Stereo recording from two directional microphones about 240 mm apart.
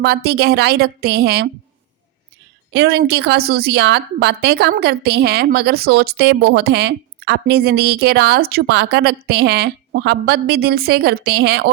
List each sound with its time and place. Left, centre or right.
0.0 s a woman's voice: right
2.7 s a woman's voice: right